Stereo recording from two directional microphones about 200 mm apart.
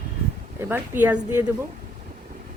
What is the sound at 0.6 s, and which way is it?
Speech, 10° right (ahead or behind).